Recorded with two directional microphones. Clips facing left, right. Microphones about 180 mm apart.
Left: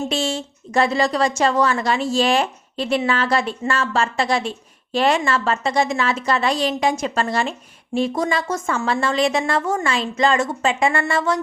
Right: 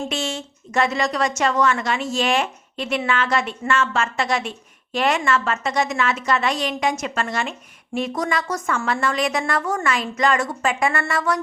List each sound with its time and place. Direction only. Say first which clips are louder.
0.1 s a woman's voice: left 4 dB; 30° left (ahead or behind)